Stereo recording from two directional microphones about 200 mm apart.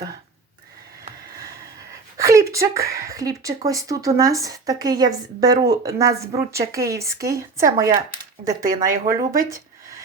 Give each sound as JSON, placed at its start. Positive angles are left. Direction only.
{"t": 2.1, "sound": "a woman's voice", "side_deg": -15}